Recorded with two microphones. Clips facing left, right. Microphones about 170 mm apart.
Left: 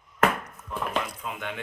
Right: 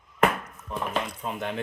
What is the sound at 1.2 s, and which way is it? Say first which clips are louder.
Speech: right 3 dB; 40° right (ahead or behind).